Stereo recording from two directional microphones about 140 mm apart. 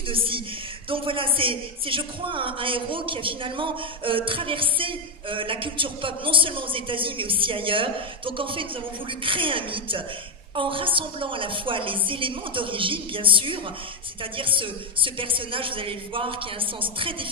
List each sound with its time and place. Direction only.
0.1 s a woman's voice: 40° right (ahead or behind)